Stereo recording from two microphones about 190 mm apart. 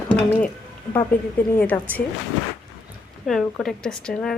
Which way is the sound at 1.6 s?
10° left (ahead or behind).